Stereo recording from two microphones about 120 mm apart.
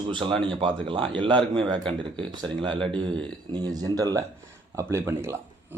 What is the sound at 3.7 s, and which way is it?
Speech, 30° right (ahead or behind).